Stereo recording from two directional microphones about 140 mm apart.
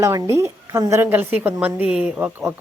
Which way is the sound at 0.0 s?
20° right (ahead or behind).